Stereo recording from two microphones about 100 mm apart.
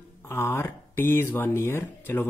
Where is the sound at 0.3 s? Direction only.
25° left (ahead or behind).